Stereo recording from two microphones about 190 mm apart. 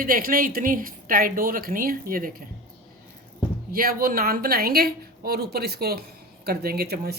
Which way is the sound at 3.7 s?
50° right (ahead or behind).